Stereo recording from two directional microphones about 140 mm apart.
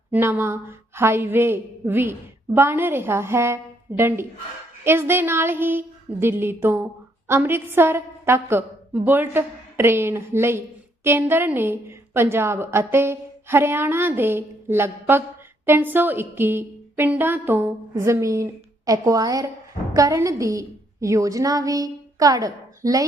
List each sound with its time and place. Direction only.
0.1 s a woman's voice: 15° right (ahead or behind)